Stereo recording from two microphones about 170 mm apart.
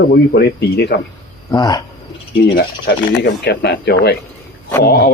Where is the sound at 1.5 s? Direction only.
20° left (ahead or behind).